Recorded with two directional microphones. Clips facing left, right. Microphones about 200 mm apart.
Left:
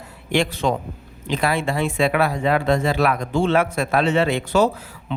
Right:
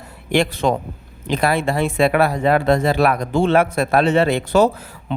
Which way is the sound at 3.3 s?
55° right (ahead or behind).